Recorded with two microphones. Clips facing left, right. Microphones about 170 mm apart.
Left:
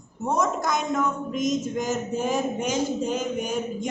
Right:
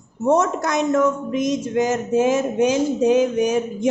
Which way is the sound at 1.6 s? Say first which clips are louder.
Right 7 dB; 85° right.